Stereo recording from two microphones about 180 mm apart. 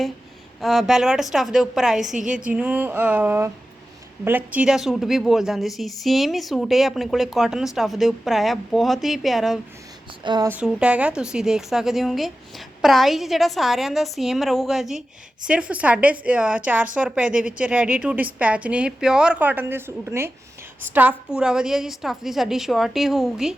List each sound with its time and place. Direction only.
0.6 s a woman's voice: centre (ahead or behind)
10.2 s a sound: 20° right (ahead or behind)
10.5 s a woman's voice: 5° right (ahead or behind)